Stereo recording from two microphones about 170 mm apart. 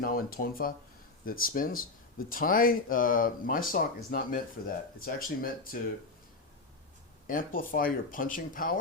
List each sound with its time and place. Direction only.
0.0 s speech: 60° left (ahead or behind)
7.3 s speech: 55° left (ahead or behind)